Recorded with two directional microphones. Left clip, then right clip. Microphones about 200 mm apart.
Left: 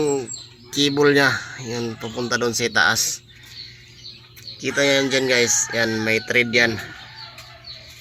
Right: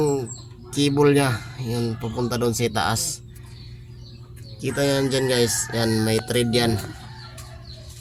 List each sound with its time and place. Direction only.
0.0 s chicken: 10° left (ahead or behind)
0.7 s speech: centre (ahead or behind)
4.6 s speech: 5° right (ahead or behind)
5.8 s speech: 15° left (ahead or behind)
6.1 s speech: 10° right (ahead or behind)